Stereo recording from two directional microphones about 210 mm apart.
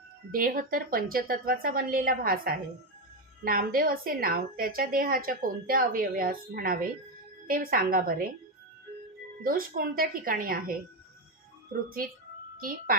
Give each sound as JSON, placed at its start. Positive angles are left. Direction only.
{"t": 0.3, "sound": "a woman's voice", "side_deg": -40}
{"t": 9.4, "sound": "a woman's voice", "side_deg": -45}